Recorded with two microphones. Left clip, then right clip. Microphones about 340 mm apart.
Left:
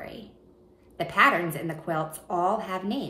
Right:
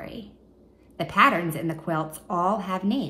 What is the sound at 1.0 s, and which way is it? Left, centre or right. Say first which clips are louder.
A woman's voice: right 1 dB; centre.